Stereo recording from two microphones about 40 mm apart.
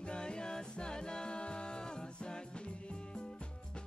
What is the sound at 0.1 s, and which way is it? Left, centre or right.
Music, left.